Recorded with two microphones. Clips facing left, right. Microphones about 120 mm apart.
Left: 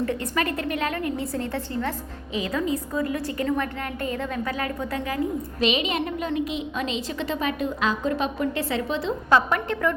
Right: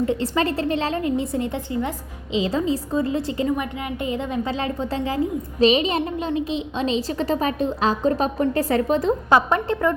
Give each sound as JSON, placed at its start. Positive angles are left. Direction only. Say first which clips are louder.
{"t": 0.0, "sound": "a woman's voice", "louder": "right 4 dB", "side_deg": -25}
{"t": 9.3, "sound": "a woman's voice", "louder": "right 1 dB", "side_deg": -30}